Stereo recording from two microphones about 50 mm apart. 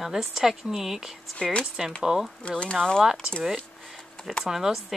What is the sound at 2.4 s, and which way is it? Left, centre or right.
Speech, left.